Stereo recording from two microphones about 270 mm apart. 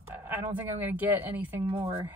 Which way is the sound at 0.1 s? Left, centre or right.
Centre.